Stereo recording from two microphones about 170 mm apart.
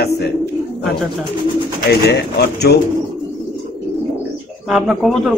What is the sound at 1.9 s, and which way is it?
Speech, 75° left (ahead or behind).